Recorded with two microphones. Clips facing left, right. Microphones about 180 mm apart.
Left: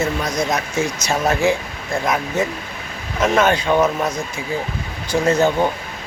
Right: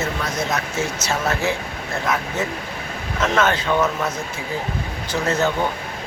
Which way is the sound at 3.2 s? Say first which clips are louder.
Left 3 dB; 15° left (ahead or behind).